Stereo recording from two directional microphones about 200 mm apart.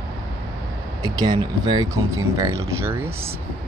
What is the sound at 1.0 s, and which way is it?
Speech, 20° right (ahead or behind).